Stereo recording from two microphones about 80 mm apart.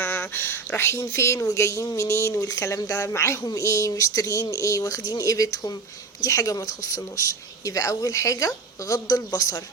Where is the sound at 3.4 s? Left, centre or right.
Left.